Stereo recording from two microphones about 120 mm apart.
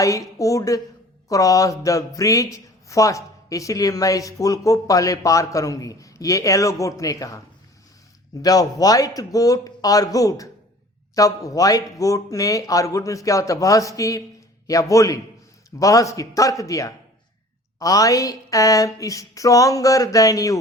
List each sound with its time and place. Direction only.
0.0 s speech: 25° left (ahead or behind)